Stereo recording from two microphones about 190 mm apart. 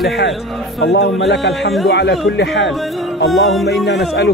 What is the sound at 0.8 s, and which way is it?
A man's voice, 70° left (ahead or behind).